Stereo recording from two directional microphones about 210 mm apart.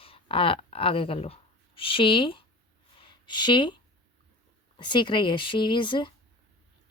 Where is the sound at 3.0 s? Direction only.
20° left (ahead or behind).